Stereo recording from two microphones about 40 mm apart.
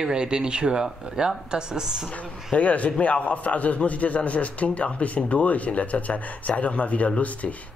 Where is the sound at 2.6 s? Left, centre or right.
Left.